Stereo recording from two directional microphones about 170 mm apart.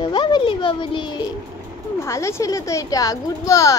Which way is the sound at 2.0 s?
15° left (ahead or behind).